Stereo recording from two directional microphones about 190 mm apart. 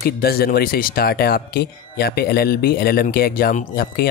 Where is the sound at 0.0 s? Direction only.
55° left (ahead or behind).